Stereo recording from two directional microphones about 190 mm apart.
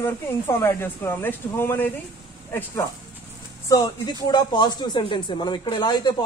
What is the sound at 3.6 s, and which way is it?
Speech, 20° left (ahead or behind).